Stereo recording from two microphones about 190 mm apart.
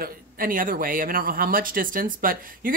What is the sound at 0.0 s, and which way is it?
Speech, 50° right (ahead or behind).